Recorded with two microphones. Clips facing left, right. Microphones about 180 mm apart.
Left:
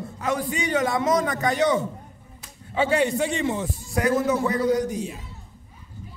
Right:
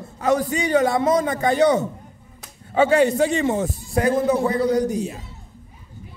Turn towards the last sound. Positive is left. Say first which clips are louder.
# right 3 dB
turn(degrees=-35)  # may be behind; listen again after turning